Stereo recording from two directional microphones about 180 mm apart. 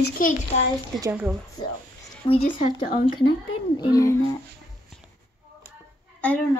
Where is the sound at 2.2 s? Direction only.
25° left (ahead or behind).